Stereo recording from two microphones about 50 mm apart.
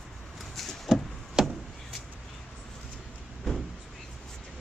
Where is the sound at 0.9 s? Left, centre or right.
Centre.